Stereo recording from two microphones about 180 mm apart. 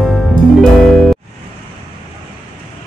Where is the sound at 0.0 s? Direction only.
Centre (ahead or behind).